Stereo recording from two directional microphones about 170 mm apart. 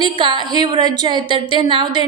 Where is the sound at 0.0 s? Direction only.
30° right (ahead or behind).